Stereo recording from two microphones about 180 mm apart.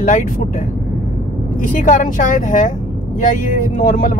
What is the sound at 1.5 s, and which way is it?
Speech, 45° left (ahead or behind).